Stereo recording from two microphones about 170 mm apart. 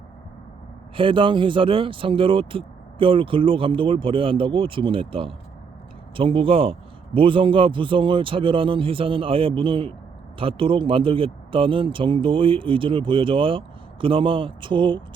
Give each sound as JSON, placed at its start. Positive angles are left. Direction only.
{"t": 0.9, "sound": "speech", "side_deg": -30}